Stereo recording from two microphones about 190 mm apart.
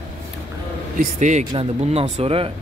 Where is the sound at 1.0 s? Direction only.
40° right (ahead or behind).